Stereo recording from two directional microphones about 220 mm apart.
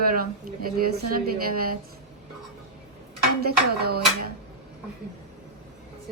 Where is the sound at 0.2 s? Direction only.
40° right (ahead or behind).